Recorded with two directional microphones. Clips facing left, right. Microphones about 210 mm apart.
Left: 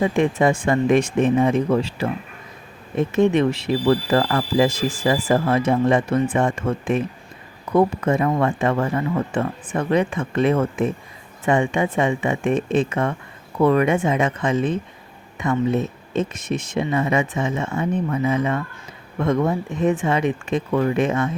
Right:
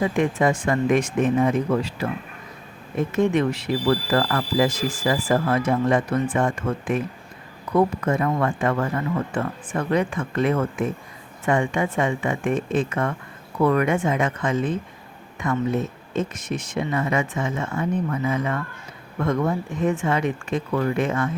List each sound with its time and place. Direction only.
0.0 s speech: 25° left (ahead or behind)
3.2 s speech: 25° left (ahead or behind)